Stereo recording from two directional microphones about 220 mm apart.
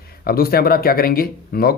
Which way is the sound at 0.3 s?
45° left (ahead or behind).